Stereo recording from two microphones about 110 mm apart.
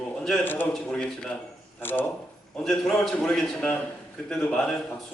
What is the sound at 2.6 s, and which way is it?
A man's voice, 5° left (ahead or behind).